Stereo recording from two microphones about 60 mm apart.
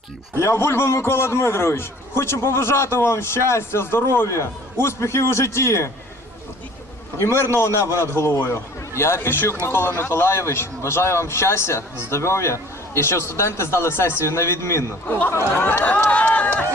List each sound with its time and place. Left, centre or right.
0.4 s a man's voice: left
7.2 s a man's voice: left
15.0 s speech: left
15.3 s a man's voice: left